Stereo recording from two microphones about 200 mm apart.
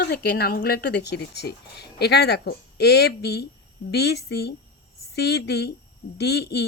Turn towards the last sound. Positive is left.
turn(degrees=55)  # may be behind; listen again after turning